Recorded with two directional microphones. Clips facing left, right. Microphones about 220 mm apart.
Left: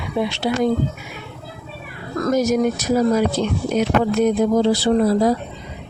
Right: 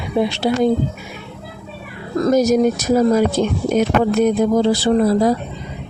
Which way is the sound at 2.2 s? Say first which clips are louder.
Right 4 dB; 40° right (ahead or behind).